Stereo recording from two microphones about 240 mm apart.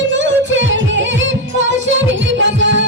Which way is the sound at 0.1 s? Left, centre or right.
Right.